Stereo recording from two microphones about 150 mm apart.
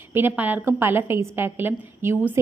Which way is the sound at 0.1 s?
10° right (ahead or behind).